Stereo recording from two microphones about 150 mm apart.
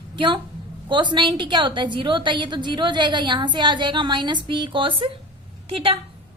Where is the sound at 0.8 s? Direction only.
30° right (ahead or behind).